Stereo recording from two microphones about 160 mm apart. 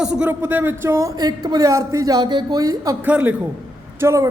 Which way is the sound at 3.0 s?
10° right (ahead or behind).